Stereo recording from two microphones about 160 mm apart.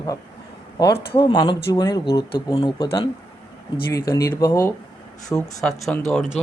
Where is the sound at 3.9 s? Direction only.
20° left (ahead or behind).